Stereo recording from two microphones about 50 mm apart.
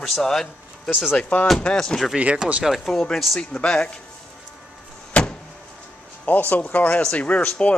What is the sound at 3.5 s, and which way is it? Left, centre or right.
Speech, centre.